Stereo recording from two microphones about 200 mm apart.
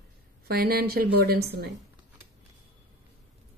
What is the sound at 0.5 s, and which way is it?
A woman's voice, 50° right (ahead or behind).